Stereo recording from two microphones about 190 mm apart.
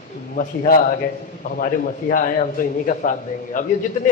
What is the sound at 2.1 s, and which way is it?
Speech, 45° left (ahead or behind).